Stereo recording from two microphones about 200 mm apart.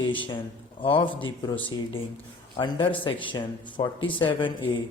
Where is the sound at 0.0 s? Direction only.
25° left (ahead or behind).